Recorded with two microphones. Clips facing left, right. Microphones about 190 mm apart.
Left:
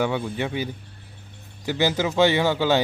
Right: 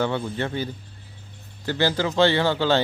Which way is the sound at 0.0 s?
10° left (ahead or behind).